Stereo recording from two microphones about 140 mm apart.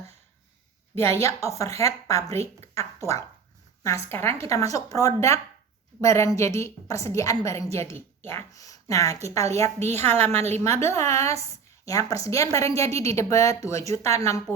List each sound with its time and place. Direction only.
0.9 s a woman's voice: 20° left (ahead or behind)
3.0 s speech: 20° right (ahead or behind)
3.8 s a woman's voice: 20° left (ahead or behind)